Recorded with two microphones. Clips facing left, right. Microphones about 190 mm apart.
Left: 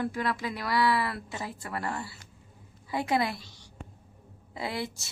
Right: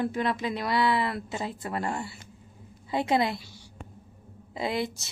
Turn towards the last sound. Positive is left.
turn(degrees=-20)  # may be behind; listen again after turning